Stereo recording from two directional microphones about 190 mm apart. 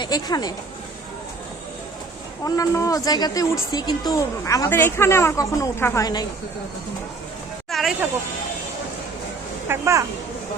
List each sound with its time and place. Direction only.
0.0 s speech: 20° left (ahead or behind)
2.4 s a woman's voice: 15° left (ahead or behind)
7.7 s a sound: centre (ahead or behind)
9.6 s speech: 15° right (ahead or behind)